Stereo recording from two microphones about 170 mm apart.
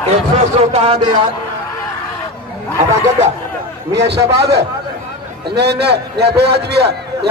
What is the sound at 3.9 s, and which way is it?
A man's voice, 80° right.